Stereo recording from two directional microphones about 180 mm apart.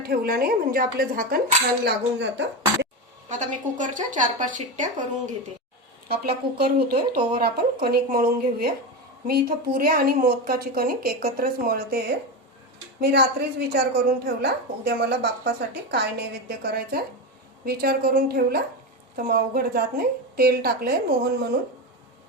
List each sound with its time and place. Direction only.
0.0 s a woman's voice: 60° right (ahead or behind); by 2.5 s 75° right (ahead or behind)
3.2 s speech: 45° right (ahead or behind)
6.1 s a woman's voice: 55° right (ahead or behind)